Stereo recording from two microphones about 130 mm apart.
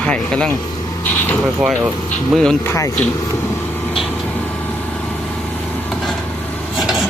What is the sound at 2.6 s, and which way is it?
Speech, 20° left (ahead or behind).